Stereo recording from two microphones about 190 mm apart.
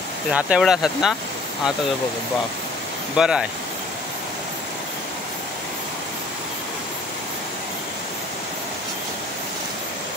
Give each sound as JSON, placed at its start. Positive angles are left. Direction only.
{"t": 0.3, "sound": "speech", "side_deg": -5}
{"t": 3.2, "sound": "speech", "side_deg": -5}